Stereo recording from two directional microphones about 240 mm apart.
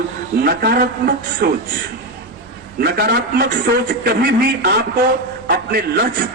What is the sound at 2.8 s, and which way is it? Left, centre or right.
A man's voice, right.